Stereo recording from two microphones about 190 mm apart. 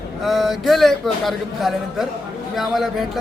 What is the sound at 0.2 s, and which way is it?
A man's voice, centre (ahead or behind).